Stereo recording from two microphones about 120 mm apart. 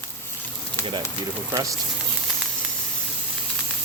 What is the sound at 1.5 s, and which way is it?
Speech, 30° right (ahead or behind).